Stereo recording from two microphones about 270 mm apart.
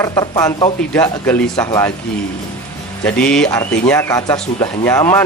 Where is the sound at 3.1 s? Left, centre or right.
Centre.